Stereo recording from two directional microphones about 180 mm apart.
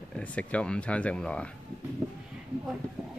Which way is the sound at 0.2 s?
5° left (ahead or behind).